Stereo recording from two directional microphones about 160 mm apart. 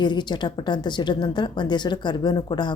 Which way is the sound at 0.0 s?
30° left (ahead or behind).